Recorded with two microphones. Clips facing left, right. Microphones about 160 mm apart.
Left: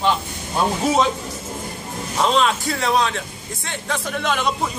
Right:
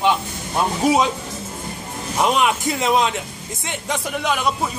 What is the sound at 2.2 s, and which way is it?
A man's voice, 15° right (ahead or behind).